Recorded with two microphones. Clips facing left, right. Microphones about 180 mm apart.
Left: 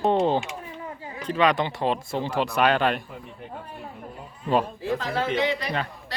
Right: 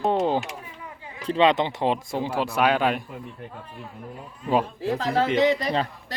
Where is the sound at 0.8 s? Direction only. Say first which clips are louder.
Left 5 dB; 35° left (ahead or behind).